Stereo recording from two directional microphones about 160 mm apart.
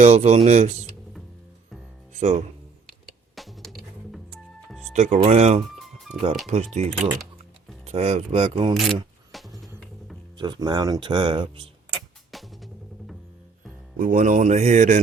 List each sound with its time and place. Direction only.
0.0 s speech: 45° right (ahead or behind)
2.1 s speech: 45° right (ahead or behind)
3.3 s music: centre (ahead or behind)
4.9 s speech: 45° right (ahead or behind)
8.7 s a sound: centre (ahead or behind)
10.3 s speech: 25° right (ahead or behind)
12.3 s drum: centre (ahead or behind)
13.9 s speech: 55° right (ahead or behind)